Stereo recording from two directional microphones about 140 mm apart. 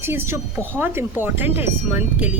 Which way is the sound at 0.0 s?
15° right (ahead or behind).